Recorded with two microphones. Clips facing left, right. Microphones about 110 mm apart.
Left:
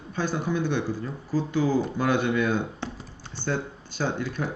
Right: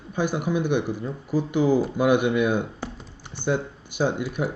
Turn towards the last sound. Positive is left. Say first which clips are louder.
# right 4 dB
turn(degrees=-15)  # may be behind; listen again after turning